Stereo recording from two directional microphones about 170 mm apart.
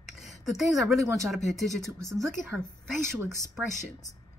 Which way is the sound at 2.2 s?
15° right (ahead or behind).